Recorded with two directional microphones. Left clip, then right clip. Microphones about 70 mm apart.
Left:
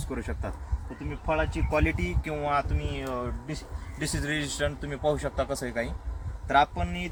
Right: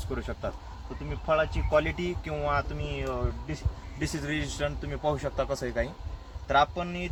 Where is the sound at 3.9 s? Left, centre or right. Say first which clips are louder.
Left 2 dB; left.